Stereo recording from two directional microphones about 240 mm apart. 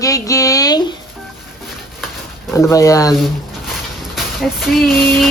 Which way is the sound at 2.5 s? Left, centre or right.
Centre.